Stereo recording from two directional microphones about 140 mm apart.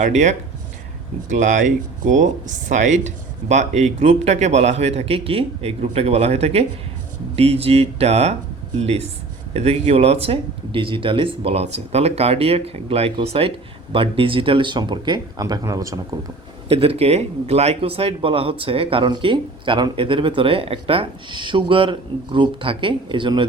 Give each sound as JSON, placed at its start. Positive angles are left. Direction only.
{"t": 0.0, "sound": "speech", "side_deg": -55}
{"t": 16.6, "sound": "speech", "side_deg": -45}